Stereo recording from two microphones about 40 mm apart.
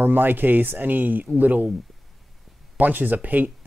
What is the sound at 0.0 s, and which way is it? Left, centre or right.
Speech, right.